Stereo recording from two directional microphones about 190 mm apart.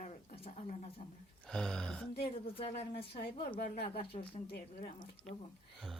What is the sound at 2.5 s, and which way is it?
A woman's voice, 30° left (ahead or behind).